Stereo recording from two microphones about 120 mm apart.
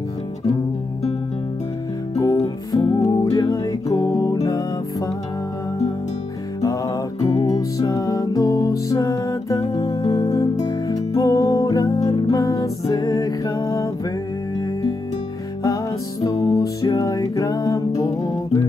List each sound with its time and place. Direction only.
2.1 s music: 30° left (ahead or behind)
6.6 s music: 25° left (ahead or behind)